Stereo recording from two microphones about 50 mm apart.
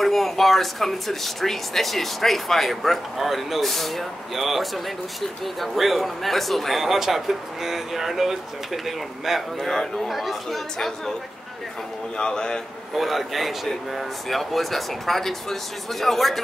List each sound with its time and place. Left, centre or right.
0.0 s speech: centre
12.2 s a man's voice: centre
12.9 s speech: centre